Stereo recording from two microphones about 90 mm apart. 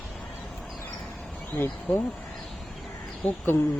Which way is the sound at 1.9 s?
20° left (ahead or behind).